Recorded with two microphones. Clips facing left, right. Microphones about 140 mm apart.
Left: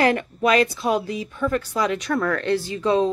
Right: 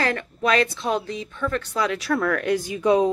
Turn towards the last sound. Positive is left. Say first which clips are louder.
# right 1 dB
turn(degrees=-15)  # may be behind; listen again after turning